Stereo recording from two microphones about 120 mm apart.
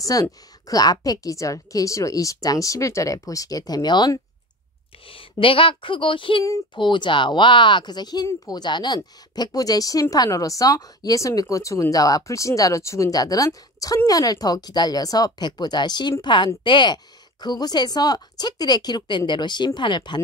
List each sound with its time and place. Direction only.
0.0 s a woman's voice: 30° left (ahead or behind)